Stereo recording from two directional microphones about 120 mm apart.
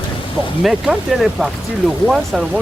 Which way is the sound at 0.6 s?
Centre (ahead or behind).